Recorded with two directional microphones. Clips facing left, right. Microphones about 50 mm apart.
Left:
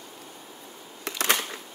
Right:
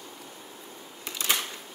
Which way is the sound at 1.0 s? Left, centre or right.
Left.